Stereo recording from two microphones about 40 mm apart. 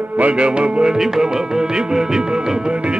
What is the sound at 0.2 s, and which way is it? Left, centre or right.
Speech, right.